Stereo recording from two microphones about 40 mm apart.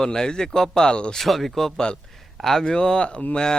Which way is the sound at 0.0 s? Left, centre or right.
Centre.